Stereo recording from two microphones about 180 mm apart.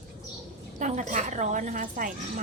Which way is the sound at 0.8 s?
40° right (ahead or behind).